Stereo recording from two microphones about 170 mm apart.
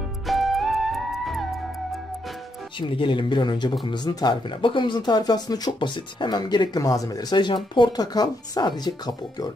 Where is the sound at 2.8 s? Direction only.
30° left (ahead or behind).